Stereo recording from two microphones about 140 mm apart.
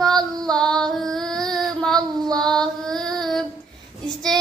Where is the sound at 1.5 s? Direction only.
5° left (ahead or behind).